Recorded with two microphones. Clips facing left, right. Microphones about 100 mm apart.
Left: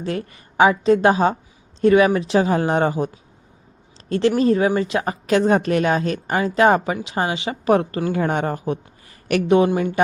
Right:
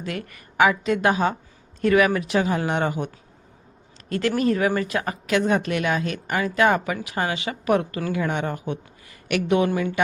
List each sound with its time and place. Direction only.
0.0 s a woman's voice: 30° left (ahead or behind)
4.1 s a woman's voice: 30° left (ahead or behind)